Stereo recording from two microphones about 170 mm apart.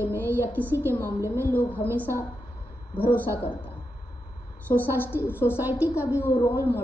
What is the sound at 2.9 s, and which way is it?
Speech, 10° left (ahead or behind).